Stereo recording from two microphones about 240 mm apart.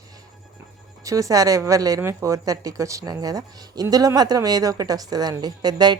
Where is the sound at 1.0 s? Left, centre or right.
Centre.